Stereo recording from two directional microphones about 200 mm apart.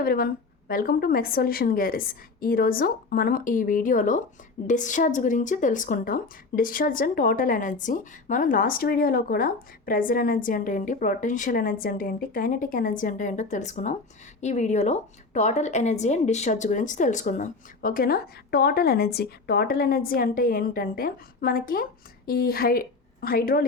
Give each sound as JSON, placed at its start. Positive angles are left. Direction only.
{"t": 0.0, "sound": "speech", "side_deg": 45}